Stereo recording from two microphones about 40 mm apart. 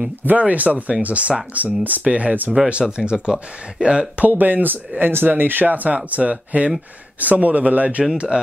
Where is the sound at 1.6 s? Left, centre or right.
Right.